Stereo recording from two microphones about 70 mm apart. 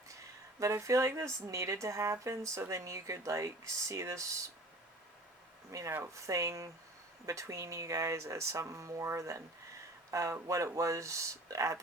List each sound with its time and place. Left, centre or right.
0.6 s speech: right
5.9 s speech: right